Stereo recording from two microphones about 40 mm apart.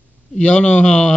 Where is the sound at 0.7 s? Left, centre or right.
Left.